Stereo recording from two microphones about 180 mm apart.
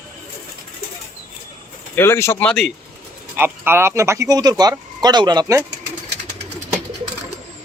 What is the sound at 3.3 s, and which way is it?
Speech, 10° right (ahead or behind).